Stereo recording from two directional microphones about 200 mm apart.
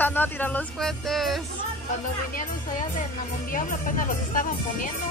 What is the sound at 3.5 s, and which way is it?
Speech, 40° left (ahead or behind).